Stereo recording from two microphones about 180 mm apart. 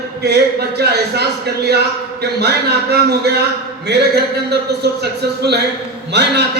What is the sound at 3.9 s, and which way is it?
Speech, 70° right (ahead or behind).